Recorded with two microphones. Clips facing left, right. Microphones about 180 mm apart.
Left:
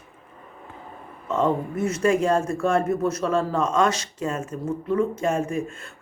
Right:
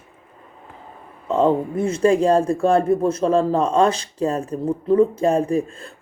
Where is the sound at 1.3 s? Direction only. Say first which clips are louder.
Right 5 dB; 30° right (ahead or behind).